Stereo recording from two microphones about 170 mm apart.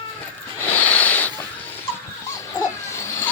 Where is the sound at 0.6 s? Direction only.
10° left (ahead or behind).